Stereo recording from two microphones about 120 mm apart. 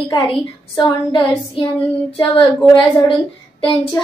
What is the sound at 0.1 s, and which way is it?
Speech, 35° left (ahead or behind).